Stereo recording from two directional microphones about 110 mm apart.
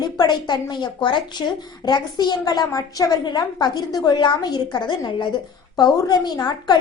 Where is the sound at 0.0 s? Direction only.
40° left (ahead or behind).